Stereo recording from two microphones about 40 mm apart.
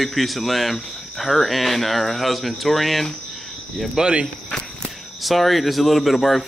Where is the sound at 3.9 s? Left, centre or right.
Right.